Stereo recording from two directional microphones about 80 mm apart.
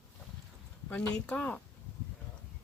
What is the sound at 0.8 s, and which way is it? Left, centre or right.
Speech, centre.